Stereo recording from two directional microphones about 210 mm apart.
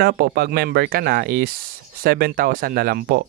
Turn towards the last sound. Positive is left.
turn(degrees=-45)  # may be behind; listen again after turning